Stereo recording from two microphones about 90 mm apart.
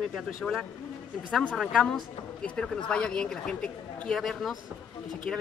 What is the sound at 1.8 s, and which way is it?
Speech, 5° left (ahead or behind).